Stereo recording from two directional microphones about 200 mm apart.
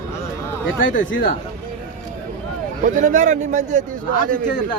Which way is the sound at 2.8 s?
40° right (ahead or behind).